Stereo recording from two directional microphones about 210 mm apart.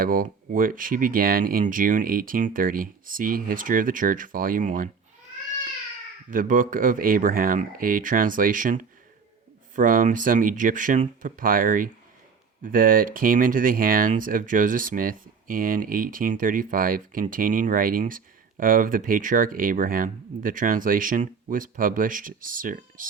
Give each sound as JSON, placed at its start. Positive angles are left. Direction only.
{"t": 0.0, "sound": "speech", "side_deg": -40}
{"t": 6.3, "sound": "speech", "side_deg": -40}